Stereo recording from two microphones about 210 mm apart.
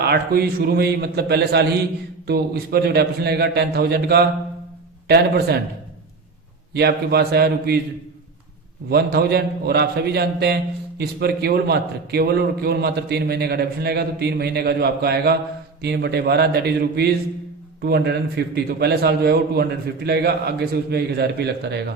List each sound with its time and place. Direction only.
0.0 s a man's voice: 50° right (ahead or behind)
6.7 s a man's voice: 50° right (ahead or behind)
8.9 s a man's voice: 50° right (ahead or behind)